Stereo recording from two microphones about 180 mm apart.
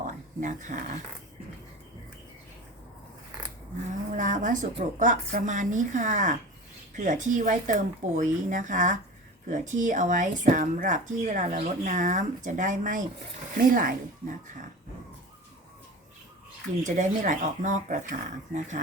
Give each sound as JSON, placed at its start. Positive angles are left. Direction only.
{"t": 0.0, "sound": "a sound", "side_deg": -45}
{"t": 4.1, "sound": "speech", "side_deg": -45}
{"t": 16.8, "sound": "speech", "side_deg": -45}